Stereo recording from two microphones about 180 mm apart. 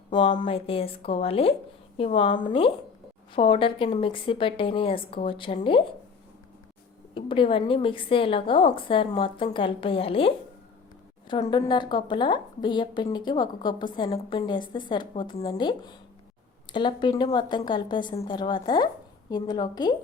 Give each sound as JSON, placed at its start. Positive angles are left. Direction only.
{"t": 0.3, "sound": "a woman's voice", "side_deg": 30}
{"t": 7.1, "sound": "a woman's voice", "side_deg": 30}
{"t": 11.5, "sound": "a woman's voice", "side_deg": 25}